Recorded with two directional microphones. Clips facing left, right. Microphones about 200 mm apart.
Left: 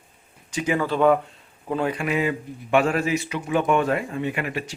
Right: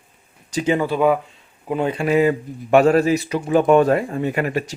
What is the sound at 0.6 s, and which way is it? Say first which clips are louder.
Speech: right 4 dB; 25° right (ahead or behind).